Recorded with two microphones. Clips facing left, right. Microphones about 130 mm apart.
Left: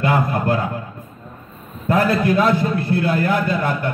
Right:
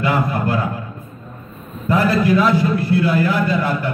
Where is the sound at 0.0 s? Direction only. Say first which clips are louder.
Even; 50° left (ahead or behind).